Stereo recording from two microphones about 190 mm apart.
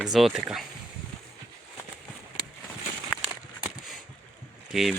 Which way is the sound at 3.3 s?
5° right (ahead or behind).